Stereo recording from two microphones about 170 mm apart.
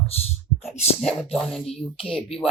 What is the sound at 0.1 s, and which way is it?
Speech, 35° left (ahead or behind).